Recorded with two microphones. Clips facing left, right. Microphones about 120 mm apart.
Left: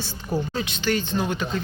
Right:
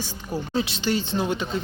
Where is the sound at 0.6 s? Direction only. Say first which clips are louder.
Right 1 dB; 25° right (ahead or behind).